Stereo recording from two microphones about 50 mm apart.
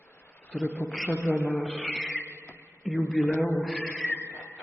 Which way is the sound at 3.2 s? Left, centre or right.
Left.